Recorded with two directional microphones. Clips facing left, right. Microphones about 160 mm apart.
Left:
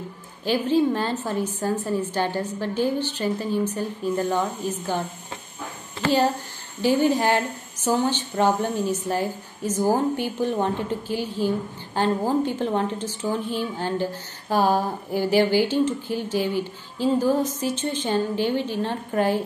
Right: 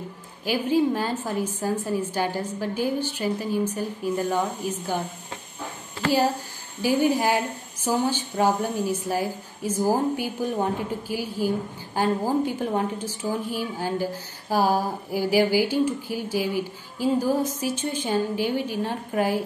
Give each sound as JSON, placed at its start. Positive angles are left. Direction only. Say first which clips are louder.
{"t": 0.5, "sound": "speech", "louder": "left 1 dB", "side_deg": -10}
{"t": 6.8, "sound": "speech", "louder": "left 2 dB", "side_deg": -10}